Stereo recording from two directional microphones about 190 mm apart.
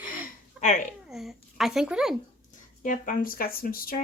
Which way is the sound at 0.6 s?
5° right (ahead or behind).